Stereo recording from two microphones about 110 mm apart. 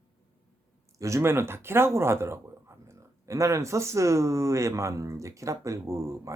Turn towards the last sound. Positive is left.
turn(degrees=-30)  # may be behind; listen again after turning